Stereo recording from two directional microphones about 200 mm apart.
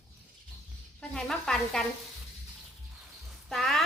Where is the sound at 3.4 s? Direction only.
Centre (ahead or behind).